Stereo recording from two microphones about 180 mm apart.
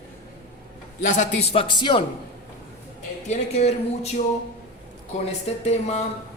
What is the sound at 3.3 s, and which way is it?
Speech, 35° left (ahead or behind).